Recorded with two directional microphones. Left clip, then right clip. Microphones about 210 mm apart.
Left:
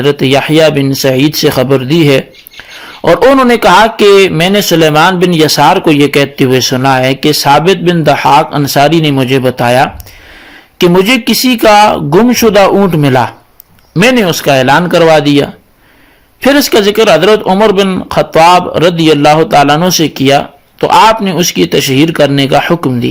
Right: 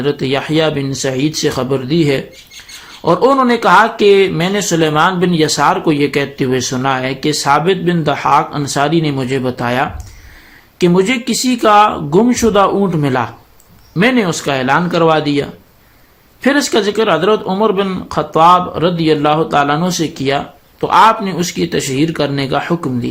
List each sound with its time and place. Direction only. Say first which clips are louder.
0.0 s speech: left 8 dB; 40° left (ahead or behind)